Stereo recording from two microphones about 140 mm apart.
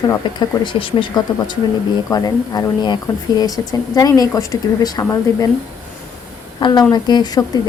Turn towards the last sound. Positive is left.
turn(degrees=30)  # may be behind; listen again after turning